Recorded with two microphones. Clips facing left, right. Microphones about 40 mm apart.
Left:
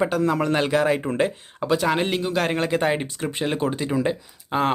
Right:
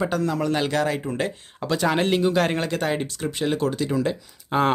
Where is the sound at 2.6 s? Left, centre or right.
Centre.